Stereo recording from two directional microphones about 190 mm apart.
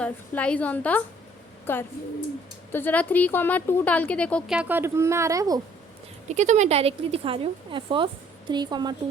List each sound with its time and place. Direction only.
0.0 s a woman's voice: 5° left (ahead or behind)
4.7 s a woman's voice: 15° right (ahead or behind)
6.2 s a woman's voice: 40° right (ahead or behind); by 9.0 s 20° right (ahead or behind)